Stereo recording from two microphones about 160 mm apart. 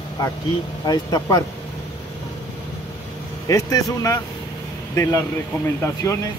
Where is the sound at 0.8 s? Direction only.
25° left (ahead or behind).